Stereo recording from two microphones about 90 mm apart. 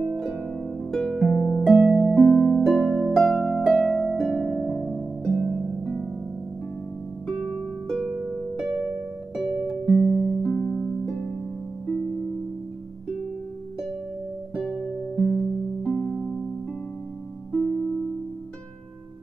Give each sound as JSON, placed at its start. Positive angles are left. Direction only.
{"t": 0.9, "sound": "harp", "side_deg": 0}
{"t": 7.2, "sound": "harp", "side_deg": 0}
{"t": 9.3, "sound": "music", "side_deg": -5}
{"t": 10.4, "sound": "harp", "side_deg": 5}
{"t": 11.8, "sound": "music", "side_deg": 10}
{"t": 14.5, "sound": "music", "side_deg": 0}
{"t": 17.5, "sound": "music", "side_deg": 10}